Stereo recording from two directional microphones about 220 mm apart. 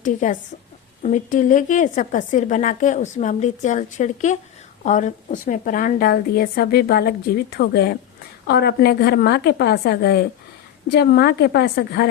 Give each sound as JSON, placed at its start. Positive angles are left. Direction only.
{"t": 0.0, "sound": "a woman's voice", "side_deg": 35}